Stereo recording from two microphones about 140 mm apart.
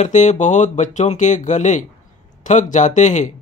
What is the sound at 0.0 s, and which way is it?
Speech, 55° left (ahead or behind).